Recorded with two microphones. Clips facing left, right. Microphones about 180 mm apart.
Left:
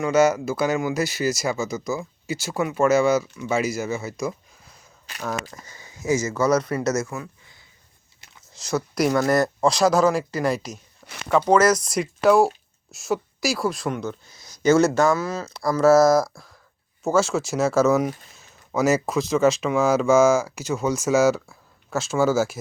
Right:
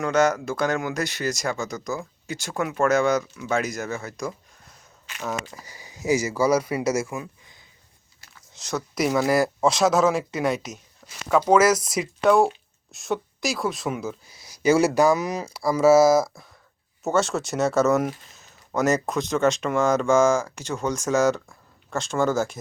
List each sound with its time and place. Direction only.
0.0 s speech: 5° left (ahead or behind); by 7.6 s 20° right (ahead or behind)
8.2 s a sound: 20° left (ahead or behind)
8.5 s speech: centre (ahead or behind)